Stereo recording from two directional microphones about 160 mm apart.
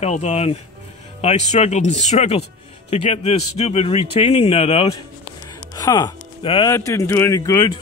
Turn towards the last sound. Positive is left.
turn(degrees=20)  # may be behind; listen again after turning